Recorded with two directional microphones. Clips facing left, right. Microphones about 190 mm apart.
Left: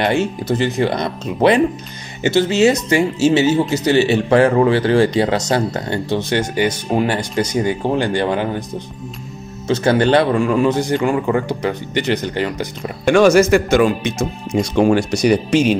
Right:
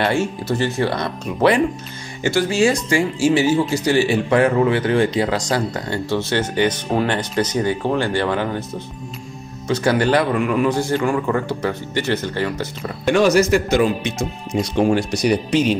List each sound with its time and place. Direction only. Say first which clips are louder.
0.0 s speech: left 2 dB; 20° left (ahead or behind)
13.2 s speech: left 4 dB; 50° left (ahead or behind)
13.5 s a man's voice: left 3 dB; 70° left (ahead or behind)
14.0 s speech: left 3 dB; 45° left (ahead or behind)
14.8 s speech: left 3 dB; 80° left